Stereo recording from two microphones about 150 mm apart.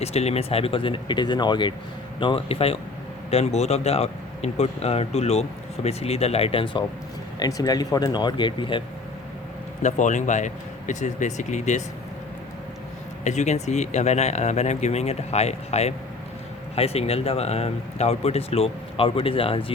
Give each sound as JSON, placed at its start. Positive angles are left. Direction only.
{"t": 0.0, "sound": "speech", "side_deg": 45}
{"t": 7.3, "sound": "speech", "side_deg": 25}
{"t": 9.8, "sound": "speech", "side_deg": 55}
{"t": 13.2, "sound": "speech", "side_deg": 50}